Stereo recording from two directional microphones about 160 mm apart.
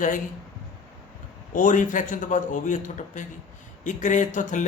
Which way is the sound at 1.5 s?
55° left (ahead or behind).